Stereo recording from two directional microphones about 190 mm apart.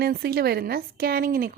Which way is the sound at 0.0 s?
55° right (ahead or behind).